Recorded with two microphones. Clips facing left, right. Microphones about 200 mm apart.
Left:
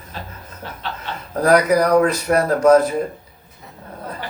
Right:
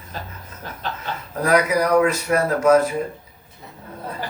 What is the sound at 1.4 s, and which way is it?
A man's voice, 35° left (ahead or behind).